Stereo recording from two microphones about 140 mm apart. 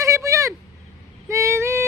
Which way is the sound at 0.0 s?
20° right (ahead or behind).